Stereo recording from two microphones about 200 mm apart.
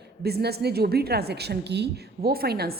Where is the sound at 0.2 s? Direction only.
50° right (ahead or behind).